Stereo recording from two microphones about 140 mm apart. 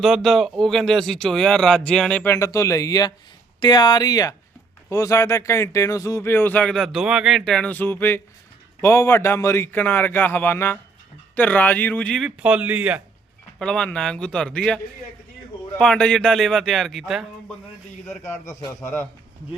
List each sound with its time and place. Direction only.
0.0 s speech: centre (ahead or behind)
2.3 s speech: 20° left (ahead or behind); by 12.3 s 5° left (ahead or behind)
12.4 s speech: 10° right (ahead or behind)
13.6 s speech: 5° left (ahead or behind)
15.8 s speech: 5° left (ahead or behind)
18.1 s speech: 20° left (ahead or behind)